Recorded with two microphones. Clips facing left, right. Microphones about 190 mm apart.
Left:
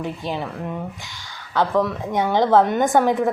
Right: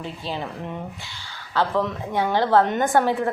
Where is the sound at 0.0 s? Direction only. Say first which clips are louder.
Left 4 dB; 15° left (ahead or behind).